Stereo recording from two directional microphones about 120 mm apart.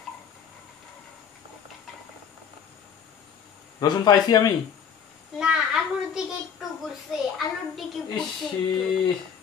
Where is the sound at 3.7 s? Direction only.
35° left (ahead or behind).